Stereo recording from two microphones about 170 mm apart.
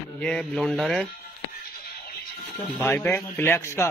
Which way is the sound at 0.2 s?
5° left (ahead or behind).